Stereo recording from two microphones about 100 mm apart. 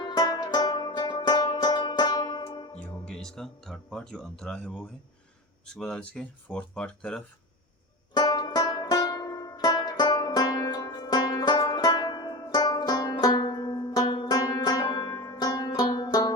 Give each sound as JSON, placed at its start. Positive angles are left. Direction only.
{"t": 0.0, "sound": "music", "side_deg": 45}
{"t": 3.1, "sound": "speech", "side_deg": 5}
{"t": 5.8, "sound": "speech", "side_deg": 10}
{"t": 8.1, "sound": "banjo", "side_deg": 45}